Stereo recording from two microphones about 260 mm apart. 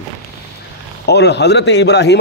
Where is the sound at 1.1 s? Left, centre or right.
Left.